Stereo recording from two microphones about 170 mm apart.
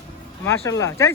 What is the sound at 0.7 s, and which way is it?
Speech, 20° left (ahead or behind).